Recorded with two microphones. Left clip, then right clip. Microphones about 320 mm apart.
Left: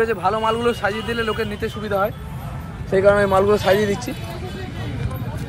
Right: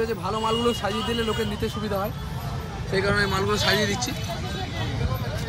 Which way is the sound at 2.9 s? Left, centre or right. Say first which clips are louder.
Left 8 dB; left.